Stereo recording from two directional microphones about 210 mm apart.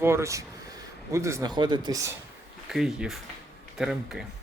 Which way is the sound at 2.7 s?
Centre (ahead or behind).